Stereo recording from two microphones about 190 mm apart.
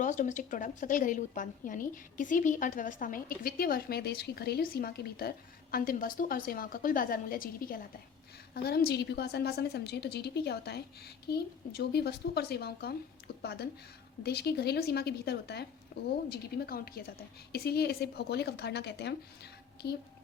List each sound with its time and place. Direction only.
0.0 s a woman's voice: 40° left (ahead or behind); by 20.0 s 60° left (ahead or behind)